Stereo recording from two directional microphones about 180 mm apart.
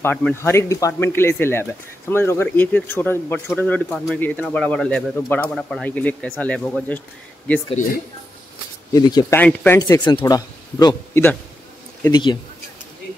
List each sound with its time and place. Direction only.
0.0 s speech: 10° left (ahead or behind)
8.9 s speech: 20° left (ahead or behind)
9.4 s speech: 10° left (ahead or behind)
9.8 s speech: 20° left (ahead or behind)